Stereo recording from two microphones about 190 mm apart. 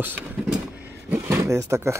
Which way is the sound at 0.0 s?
10° right (ahead or behind).